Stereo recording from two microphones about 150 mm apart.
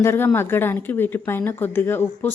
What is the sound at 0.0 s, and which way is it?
A woman's voice, 15° left (ahead or behind).